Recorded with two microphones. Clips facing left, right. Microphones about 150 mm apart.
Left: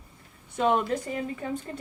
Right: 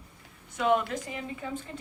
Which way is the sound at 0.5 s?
35° left (ahead or behind).